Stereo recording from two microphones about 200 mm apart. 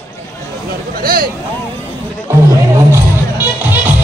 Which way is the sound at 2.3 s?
10° right (ahead or behind).